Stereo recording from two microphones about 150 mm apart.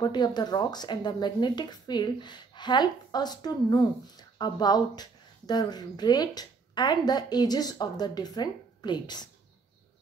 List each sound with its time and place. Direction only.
0.0 s speech: 30° left (ahead or behind)